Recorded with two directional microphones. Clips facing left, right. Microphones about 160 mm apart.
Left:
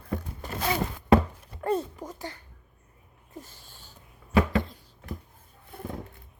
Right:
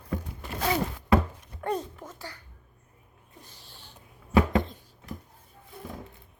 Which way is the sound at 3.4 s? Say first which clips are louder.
Left 4 dB; 45° left (ahead or behind).